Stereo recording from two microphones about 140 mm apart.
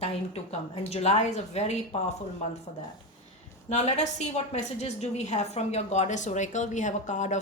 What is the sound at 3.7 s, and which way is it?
A woman's voice, 50° left (ahead or behind).